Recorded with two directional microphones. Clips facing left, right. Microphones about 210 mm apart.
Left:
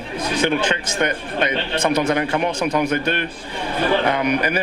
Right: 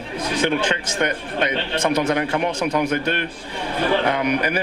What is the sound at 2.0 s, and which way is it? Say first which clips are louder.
A man's voice: left 1 dB; 20° left (ahead or behind).